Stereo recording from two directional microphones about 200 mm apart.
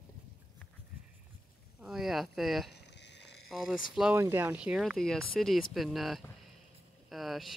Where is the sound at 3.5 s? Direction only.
Centre (ahead or behind).